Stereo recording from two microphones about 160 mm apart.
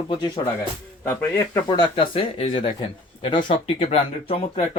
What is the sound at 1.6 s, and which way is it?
Speech, 30° left (ahead or behind).